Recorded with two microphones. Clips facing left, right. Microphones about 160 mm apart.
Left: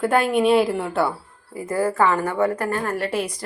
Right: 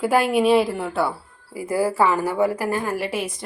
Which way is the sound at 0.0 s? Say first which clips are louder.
Even; 5° right (ahead or behind).